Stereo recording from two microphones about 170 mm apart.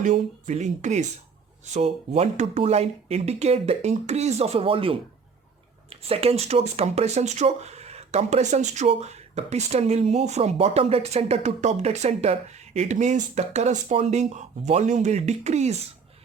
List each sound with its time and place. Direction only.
0.0 s speech: 45° right (ahead or behind)